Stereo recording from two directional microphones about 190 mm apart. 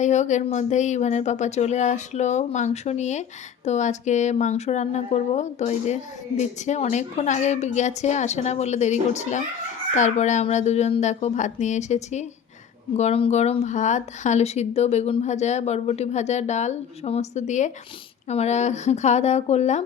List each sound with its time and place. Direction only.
0.0 s speech: 40° left (ahead or behind)